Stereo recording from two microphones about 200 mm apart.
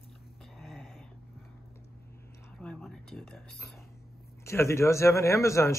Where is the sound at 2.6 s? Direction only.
Centre (ahead or behind).